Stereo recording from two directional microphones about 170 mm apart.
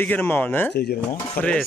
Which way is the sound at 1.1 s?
10° left (ahead or behind).